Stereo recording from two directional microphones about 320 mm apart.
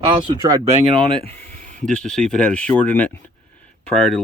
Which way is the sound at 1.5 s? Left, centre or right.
Right.